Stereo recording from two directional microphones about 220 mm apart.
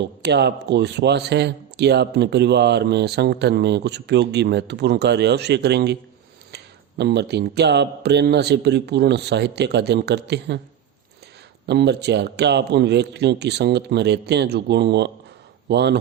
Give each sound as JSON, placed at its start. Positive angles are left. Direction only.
{"t": 0.0, "sound": "speech", "side_deg": -50}
{"t": 11.6, "sound": "speech", "side_deg": -50}